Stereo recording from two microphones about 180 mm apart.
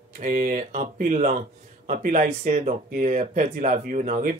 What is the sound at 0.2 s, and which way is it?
Speech, 50° right (ahead or behind).